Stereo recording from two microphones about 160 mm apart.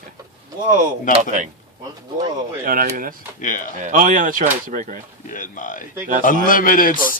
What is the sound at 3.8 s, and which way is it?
Speech, 55° right (ahead or behind).